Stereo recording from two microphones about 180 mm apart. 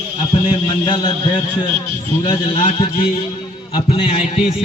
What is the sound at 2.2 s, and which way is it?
A man's voice, 30° left (ahead or behind).